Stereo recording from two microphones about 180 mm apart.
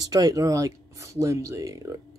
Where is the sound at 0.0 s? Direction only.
20° right (ahead or behind).